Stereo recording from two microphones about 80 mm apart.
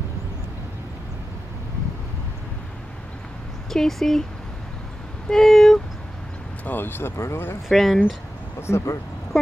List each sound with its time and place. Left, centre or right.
3.7 s speech: centre
5.3 s speech: centre
6.6 s speech: left
7.6 s speech: centre
8.5 s speech: left